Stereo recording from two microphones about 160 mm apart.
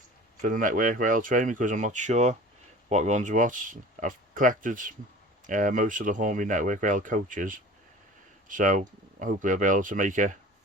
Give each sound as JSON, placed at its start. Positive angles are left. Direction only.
{"t": 0.4, "sound": "speech", "side_deg": -55}